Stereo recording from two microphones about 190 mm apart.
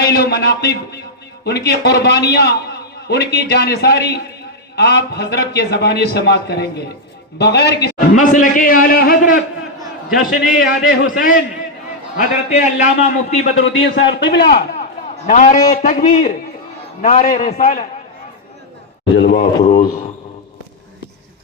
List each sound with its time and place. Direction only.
0.0 s a man's voice: 55° left (ahead or behind)
8.1 s a man's voice: 45° left (ahead or behind)
13.6 s a man's voice: 75° left (ahead or behind)
15.3 s a man's voice: 45° left (ahead or behind)
19.1 s a man's voice: 60° left (ahead or behind)